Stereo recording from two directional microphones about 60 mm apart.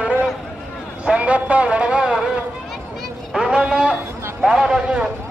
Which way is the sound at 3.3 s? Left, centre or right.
Centre.